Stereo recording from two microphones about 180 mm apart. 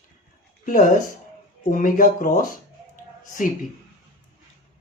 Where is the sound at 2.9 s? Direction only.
50° left (ahead or behind).